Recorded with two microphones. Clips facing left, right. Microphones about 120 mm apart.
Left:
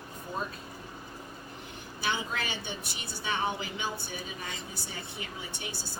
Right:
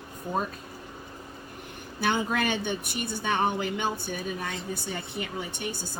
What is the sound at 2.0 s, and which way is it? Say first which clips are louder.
A woman's voice: right 7 dB; 50° right (ahead or behind).